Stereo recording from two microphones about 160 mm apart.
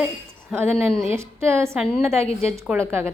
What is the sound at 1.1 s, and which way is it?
A woman's voice, 15° right (ahead or behind).